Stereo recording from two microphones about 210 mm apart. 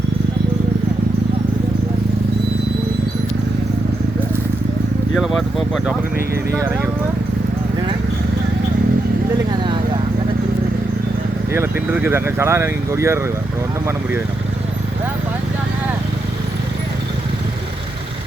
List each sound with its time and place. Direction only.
5.1 s speech: centre (ahead or behind)
6.5 s speech: 15° right (ahead or behind)
9.5 s vehicle: 20° right (ahead or behind)
11.5 s speech: 10° right (ahead or behind)